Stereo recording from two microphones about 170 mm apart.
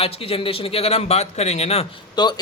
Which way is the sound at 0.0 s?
35° left (ahead or behind).